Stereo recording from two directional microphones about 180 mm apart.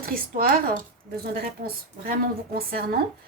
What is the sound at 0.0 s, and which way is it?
A woman's voice, 55° right (ahead or behind).